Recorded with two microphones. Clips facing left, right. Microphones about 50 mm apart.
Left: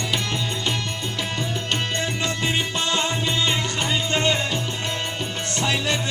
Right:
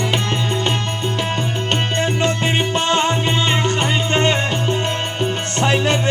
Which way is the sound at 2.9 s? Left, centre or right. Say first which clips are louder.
Right 6 dB; right.